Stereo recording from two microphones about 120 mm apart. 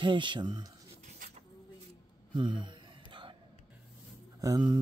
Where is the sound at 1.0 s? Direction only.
90° right.